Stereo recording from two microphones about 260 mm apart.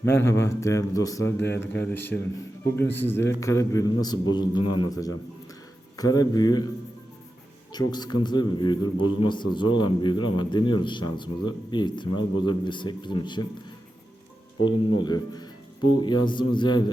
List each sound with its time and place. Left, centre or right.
0.0 s a man's voice: centre
7.7 s a man's voice: centre
14.6 s a man's voice: centre